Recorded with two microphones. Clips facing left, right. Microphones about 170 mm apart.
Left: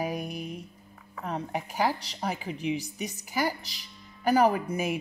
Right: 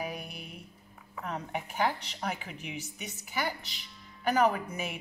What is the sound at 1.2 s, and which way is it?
A woman's voice, 35° left (ahead or behind).